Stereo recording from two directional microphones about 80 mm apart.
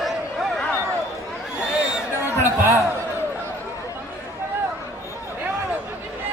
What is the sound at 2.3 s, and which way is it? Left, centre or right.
Speech, right.